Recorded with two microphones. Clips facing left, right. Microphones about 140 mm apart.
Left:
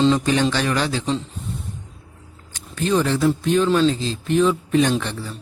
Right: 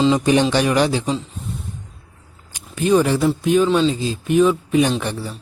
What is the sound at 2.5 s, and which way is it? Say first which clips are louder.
A man's voice: right 5 dB; 10° right (ahead or behind).